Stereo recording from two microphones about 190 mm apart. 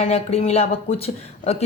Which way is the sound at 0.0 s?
35° left (ahead or behind).